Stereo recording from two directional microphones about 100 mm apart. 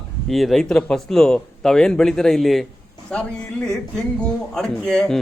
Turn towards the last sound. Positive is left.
turn(degrees=5)  # may be behind; listen again after turning